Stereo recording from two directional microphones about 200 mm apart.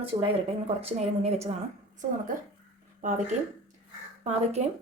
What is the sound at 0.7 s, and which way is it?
Speech, 30° right (ahead or behind).